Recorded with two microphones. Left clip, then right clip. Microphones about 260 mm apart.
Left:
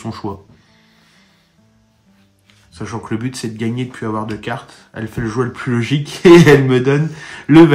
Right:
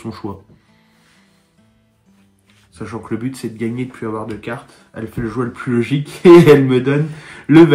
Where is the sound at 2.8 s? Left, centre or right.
Left.